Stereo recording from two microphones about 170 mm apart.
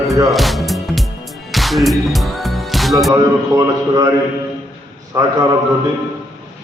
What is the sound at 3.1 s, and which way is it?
Speech, 20° right (ahead or behind).